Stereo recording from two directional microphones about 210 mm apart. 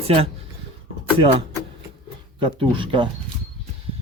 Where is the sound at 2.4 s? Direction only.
25° right (ahead or behind).